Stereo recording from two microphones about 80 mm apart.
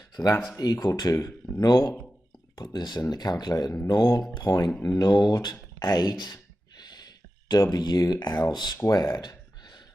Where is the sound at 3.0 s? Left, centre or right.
Left.